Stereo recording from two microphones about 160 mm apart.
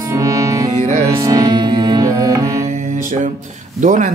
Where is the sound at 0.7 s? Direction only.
50° right (ahead or behind).